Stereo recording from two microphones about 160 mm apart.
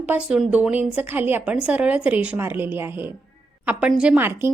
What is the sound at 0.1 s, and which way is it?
Speech, 5° right (ahead or behind).